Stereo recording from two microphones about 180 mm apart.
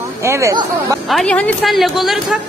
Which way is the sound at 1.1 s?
5° left (ahead or behind).